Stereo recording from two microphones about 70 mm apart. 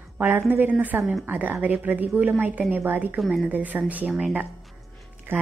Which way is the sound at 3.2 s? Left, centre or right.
Centre.